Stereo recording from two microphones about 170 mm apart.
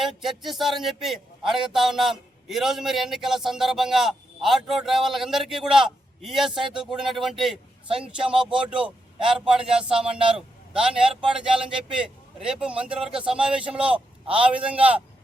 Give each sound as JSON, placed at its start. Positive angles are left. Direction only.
{"t": 0.0, "sound": "a man's voice", "side_deg": 0}
{"t": 7.9, "sound": "a man's voice", "side_deg": -30}
{"t": 8.3, "sound": "a man's voice", "side_deg": -5}
{"t": 10.2, "sound": "a man's voice", "side_deg": -30}
{"t": 10.8, "sound": "a man's voice", "side_deg": -5}